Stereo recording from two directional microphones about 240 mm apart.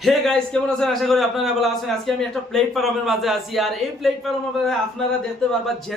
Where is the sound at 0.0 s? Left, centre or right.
Centre.